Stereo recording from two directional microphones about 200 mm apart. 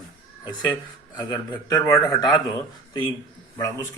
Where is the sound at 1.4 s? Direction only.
20° left (ahead or behind).